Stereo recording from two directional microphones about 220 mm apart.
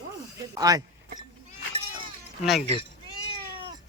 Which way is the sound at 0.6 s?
15° right (ahead or behind).